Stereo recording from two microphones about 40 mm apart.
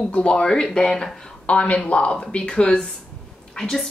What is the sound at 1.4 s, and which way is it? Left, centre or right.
Speech, left.